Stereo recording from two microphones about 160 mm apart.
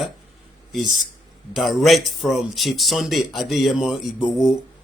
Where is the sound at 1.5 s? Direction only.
Centre (ahead or behind).